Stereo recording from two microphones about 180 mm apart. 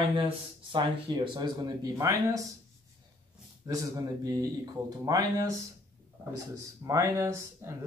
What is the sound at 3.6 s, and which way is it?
Speech, 20° right (ahead or behind).